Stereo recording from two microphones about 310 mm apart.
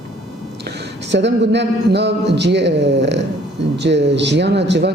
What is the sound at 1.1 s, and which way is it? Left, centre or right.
Speech, right.